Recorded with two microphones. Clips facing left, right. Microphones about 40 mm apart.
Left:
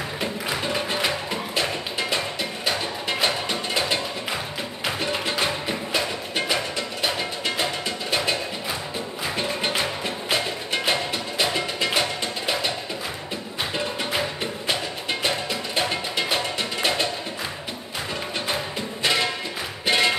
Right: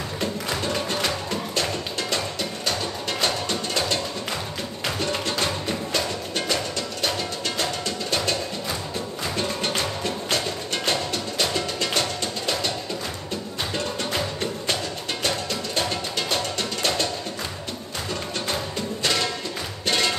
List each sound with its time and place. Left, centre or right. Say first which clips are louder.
0.2 s music: right 1 dB; centre
13.7 s music: left 1 dB; centre
18.5 s music: even; centre